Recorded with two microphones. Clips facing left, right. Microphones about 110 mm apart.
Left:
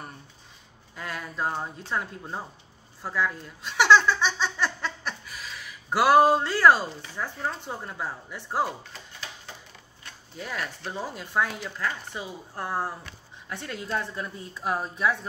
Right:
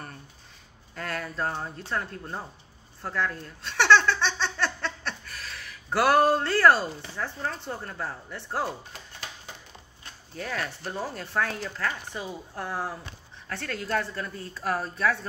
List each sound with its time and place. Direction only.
0.9 s speech: 10° left (ahead or behind)
3.0 s giggle: 10° left (ahead or behind)
7.2 s speech: 15° left (ahead or behind)
10.3 s speech: 10° left (ahead or behind)
11.8 s speech: 20° left (ahead or behind)
12.5 s speech: 5° left (ahead or behind)
13.5 s speech: 15° left (ahead or behind)